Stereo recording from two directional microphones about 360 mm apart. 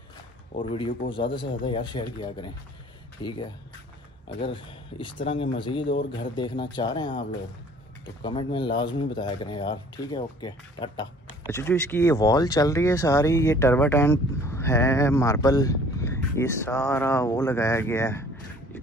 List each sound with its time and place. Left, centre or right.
0.6 s speech: centre
4.5 s speech: centre
5.9 s a man's voice: left
6.3 s speech: centre